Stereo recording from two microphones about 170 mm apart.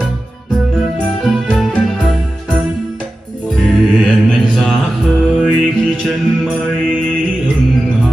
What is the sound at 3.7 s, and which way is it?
Mantra, centre (ahead or behind).